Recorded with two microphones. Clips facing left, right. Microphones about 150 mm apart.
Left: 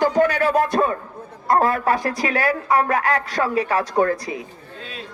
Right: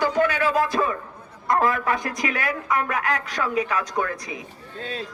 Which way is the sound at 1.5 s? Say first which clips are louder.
Left 3 dB; 30° left (ahead or behind).